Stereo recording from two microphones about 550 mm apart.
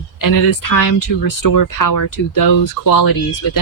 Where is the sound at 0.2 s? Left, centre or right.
Left.